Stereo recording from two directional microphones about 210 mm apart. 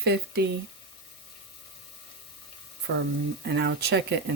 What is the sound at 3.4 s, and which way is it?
Speech, 55° right (ahead or behind).